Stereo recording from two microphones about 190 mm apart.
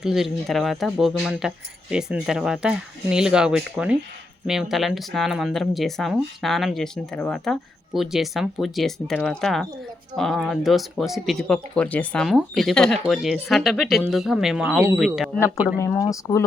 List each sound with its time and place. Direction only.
0.0 s speech: centre (ahead or behind)
15.8 s speech: 15° left (ahead or behind)